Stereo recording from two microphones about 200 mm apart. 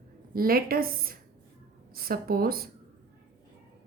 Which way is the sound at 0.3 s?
45° right (ahead or behind).